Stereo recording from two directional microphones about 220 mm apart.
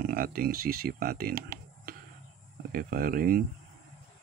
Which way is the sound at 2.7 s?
40° right (ahead or behind).